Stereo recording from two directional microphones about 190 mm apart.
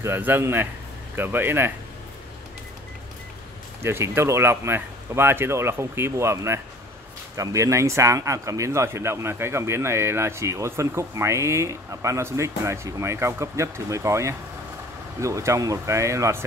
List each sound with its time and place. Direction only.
0.0 s speech: 10° right (ahead or behind)
3.8 s speech: 15° right (ahead or behind)